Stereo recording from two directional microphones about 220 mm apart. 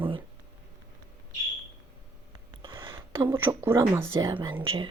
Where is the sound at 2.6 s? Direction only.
20° right (ahead or behind).